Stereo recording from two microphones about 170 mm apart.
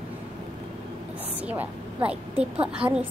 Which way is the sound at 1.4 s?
10° right (ahead or behind).